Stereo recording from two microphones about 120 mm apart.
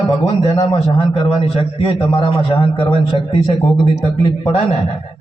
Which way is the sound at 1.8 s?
45° left (ahead or behind).